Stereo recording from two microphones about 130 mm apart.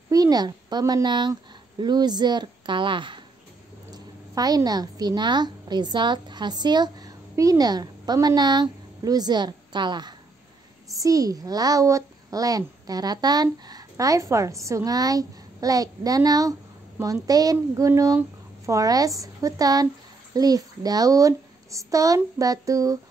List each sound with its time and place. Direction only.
0.1 s a woman's voice: 30° right (ahead or behind)